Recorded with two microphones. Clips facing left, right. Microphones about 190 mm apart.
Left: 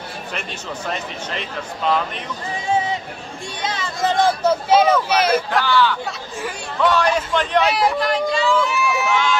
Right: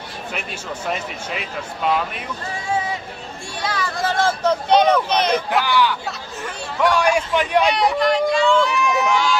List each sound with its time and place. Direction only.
0.3 s speech: 5° right (ahead or behind)
3.6 s a sound: 20° left (ahead or behind); by 5.4 s 5° left (ahead or behind)
5.5 s speech: 15° right (ahead or behind)
7.6 s speech: centre (ahead or behind)